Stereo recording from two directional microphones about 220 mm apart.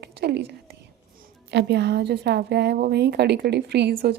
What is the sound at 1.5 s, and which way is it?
A woman's voice, 50° right (ahead or behind).